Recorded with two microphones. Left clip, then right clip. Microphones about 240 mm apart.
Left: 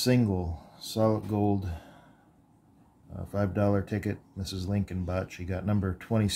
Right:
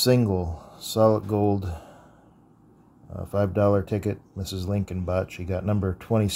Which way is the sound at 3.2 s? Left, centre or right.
Centre.